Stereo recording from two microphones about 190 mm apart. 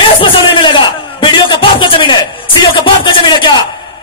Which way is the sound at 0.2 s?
25° left (ahead or behind).